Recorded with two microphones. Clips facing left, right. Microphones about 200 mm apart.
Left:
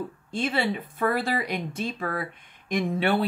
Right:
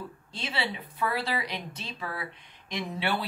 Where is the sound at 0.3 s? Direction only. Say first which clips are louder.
Left 8 dB; 50° left (ahead or behind).